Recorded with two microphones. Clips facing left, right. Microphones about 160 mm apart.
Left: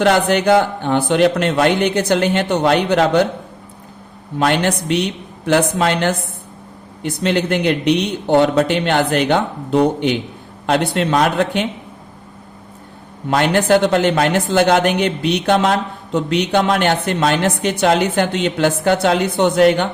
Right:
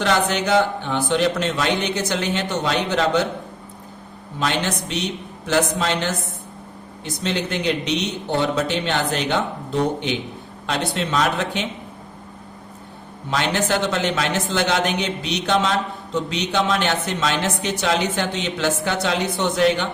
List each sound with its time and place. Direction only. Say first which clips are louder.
0.0 s a man's voice: left 6 dB; 55° left (ahead or behind)
4.4 s a man's voice: left 7 dB; 60° left (ahead or behind)
13.3 s a man's voice: left 7 dB; 55° left (ahead or behind)